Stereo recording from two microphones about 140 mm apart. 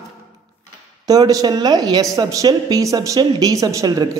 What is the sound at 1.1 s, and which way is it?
Speech, 25° right (ahead or behind).